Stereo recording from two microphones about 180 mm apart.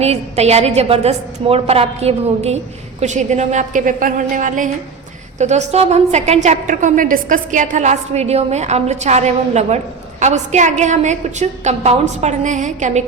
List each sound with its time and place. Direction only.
0.0 s a woman's voice: 35° right (ahead or behind)